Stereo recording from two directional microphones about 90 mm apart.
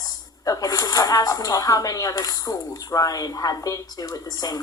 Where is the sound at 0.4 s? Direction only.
40° left (ahead or behind).